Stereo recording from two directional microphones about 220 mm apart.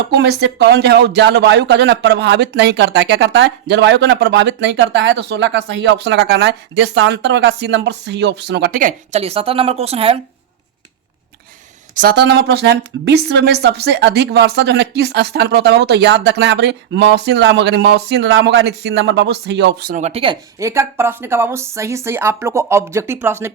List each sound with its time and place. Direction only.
0.1 s speech: 50° right (ahead or behind); by 10.2 s 25° right (ahead or behind)
11.9 s speech: 45° right (ahead or behind)
19.9 s speech: 30° right (ahead or behind); by 23.5 s 10° right (ahead or behind)